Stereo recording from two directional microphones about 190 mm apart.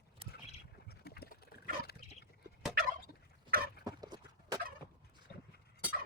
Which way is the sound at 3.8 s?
20° right (ahead or behind).